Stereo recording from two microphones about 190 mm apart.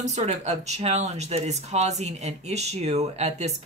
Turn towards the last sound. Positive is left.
turn(degrees=-35)  # may be behind; listen again after turning